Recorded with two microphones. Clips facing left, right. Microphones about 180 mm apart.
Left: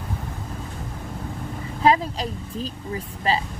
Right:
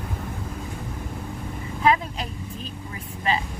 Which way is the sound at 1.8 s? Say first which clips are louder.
Left 2 dB; 35° left (ahead or behind).